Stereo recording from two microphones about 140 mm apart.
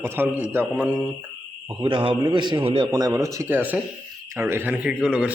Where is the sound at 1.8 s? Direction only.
35° right (ahead or behind).